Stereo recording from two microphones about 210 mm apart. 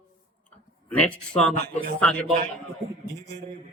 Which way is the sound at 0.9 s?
5° left (ahead or behind).